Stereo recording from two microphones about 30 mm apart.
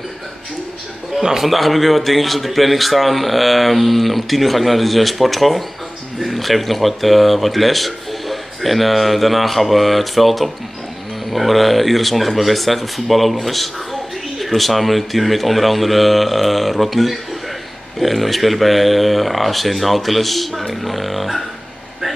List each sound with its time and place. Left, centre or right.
1.2 s a man's voice: centre
1.5 s speech: centre